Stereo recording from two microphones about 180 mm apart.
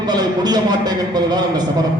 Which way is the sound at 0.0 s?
25° right (ahead or behind).